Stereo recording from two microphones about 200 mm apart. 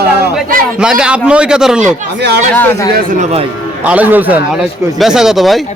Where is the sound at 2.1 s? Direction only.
55° right (ahead or behind).